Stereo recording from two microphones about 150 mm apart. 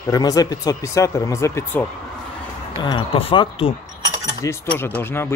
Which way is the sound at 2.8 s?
35° left (ahead or behind).